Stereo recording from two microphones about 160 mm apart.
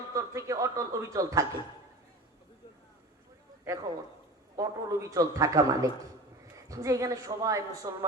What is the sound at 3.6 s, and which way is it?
A man's voice, 20° right (ahead or behind).